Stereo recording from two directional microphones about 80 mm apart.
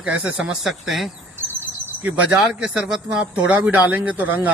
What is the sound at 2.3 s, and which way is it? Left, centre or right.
Speech, centre.